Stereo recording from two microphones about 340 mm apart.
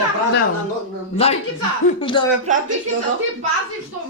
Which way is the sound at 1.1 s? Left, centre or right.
Centre.